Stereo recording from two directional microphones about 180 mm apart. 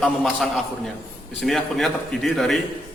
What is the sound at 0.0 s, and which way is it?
Speech, centre (ahead or behind).